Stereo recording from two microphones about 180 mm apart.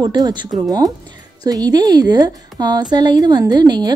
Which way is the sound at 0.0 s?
25° right (ahead or behind).